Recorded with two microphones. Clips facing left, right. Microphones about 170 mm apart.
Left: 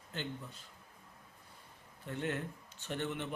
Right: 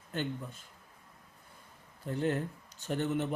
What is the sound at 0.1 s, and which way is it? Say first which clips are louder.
Speech: right 6 dB; 50° right (ahead or behind).